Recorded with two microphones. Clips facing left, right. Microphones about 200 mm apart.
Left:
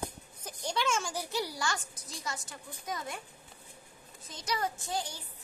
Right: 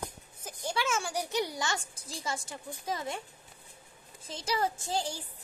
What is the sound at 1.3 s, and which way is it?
A woman's voice, 20° right (ahead or behind).